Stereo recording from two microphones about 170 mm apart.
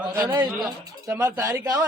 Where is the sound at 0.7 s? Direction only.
20° right (ahead or behind).